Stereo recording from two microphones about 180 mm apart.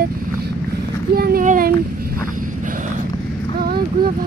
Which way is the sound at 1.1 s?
55° right (ahead or behind).